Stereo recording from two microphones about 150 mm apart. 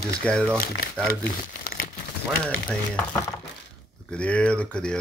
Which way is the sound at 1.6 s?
85° left.